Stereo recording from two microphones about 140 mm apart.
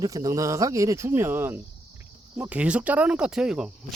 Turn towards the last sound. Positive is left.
turn(degrees=-5)  # may be behind; listen again after turning